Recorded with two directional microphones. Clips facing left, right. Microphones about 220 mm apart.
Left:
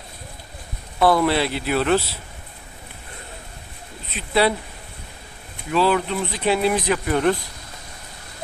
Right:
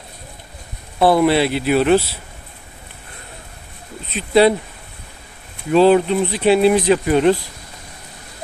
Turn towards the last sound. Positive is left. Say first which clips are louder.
# right 6 dB
turn(degrees=-20)  # may be behind; listen again after turning